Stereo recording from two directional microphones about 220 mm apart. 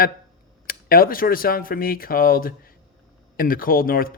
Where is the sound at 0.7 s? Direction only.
40° left (ahead or behind).